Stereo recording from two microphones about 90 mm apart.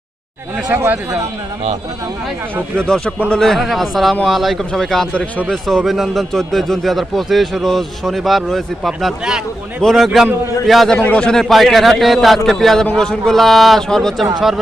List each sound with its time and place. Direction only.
0.7 s speech: 25° right (ahead or behind)
2.7 s a man's voice: 10° left (ahead or behind)